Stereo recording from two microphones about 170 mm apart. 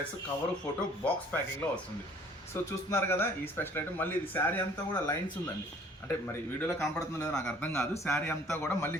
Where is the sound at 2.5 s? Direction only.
15° left (ahead or behind).